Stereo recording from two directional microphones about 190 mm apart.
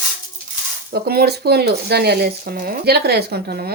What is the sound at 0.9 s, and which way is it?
Speech, 55° right (ahead or behind).